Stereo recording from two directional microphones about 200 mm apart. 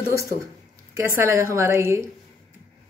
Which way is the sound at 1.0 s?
15° right (ahead or behind).